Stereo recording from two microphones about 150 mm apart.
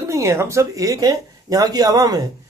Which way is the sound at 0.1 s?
20° right (ahead or behind).